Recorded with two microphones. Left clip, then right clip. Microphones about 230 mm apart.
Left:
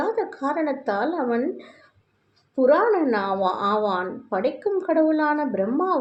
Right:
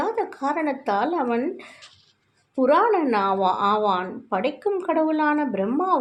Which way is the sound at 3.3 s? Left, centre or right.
Right.